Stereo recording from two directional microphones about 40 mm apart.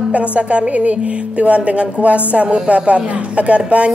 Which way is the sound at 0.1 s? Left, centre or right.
Right.